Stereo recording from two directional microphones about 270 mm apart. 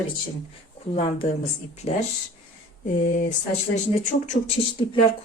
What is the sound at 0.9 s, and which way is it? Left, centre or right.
Speech, left.